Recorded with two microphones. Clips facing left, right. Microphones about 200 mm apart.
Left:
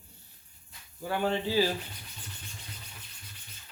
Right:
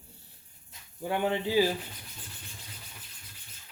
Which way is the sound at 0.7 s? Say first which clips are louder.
Right 2 dB; 20° right (ahead or behind).